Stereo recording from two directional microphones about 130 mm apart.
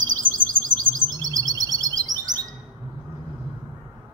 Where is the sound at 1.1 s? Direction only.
25° right (ahead or behind).